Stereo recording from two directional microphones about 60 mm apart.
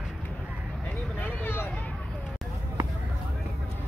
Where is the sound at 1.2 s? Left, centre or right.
Left.